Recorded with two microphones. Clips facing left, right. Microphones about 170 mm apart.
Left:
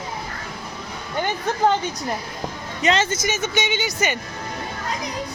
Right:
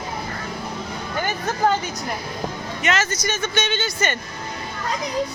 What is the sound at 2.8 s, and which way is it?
Speech, 30° left (ahead or behind).